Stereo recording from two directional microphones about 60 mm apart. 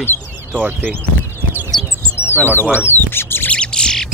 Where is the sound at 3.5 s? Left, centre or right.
Centre.